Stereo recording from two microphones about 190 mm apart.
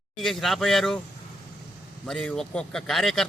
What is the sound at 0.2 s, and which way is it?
Speech, centre (ahead or behind).